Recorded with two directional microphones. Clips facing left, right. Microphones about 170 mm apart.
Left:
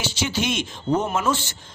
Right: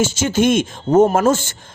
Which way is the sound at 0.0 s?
45° right (ahead or behind).